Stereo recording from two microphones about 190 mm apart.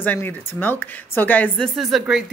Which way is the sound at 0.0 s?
10° left (ahead or behind).